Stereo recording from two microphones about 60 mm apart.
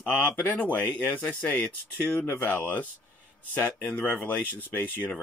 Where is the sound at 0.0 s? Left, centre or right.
Left.